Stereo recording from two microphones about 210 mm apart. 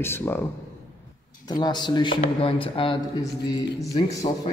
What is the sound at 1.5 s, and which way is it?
Speech, 20° left (ahead or behind).